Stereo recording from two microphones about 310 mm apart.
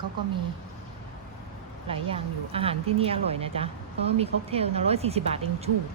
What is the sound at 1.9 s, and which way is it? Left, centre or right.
Speech, centre.